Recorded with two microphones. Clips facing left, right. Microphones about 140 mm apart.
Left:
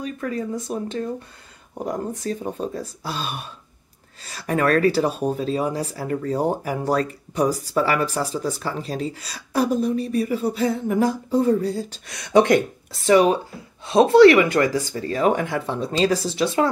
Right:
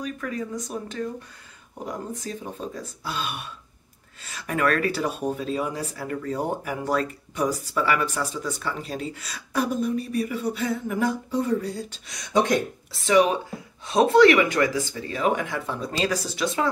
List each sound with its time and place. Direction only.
0.0 s a sound: 35° left (ahead or behind)
0.7 s speech: 30° left (ahead or behind)
12.3 s speech: 65° left (ahead or behind)
13.0 s speech: 35° left (ahead or behind)